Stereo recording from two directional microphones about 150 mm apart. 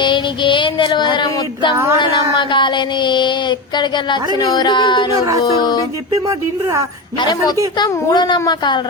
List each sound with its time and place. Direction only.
0.0 s child singing: 35° left (ahead or behind)
1.7 s speech: 20° right (ahead or behind)
2.0 s child singing: 30° left (ahead or behind)
4.4 s a child's voice: 25° left (ahead or behind)
6.2 s speech: 20° right (ahead or behind)
7.2 s a child's voice: 30° left (ahead or behind)